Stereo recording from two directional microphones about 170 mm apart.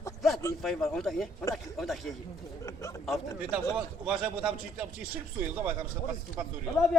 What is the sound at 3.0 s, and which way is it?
A man's voice, 5° right (ahead or behind).